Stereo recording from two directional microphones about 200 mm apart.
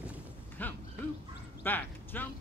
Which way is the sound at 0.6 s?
10° left (ahead or behind).